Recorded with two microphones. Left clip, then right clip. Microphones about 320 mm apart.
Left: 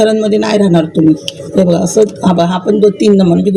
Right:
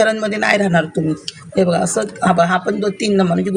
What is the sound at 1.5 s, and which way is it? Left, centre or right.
Speech, right.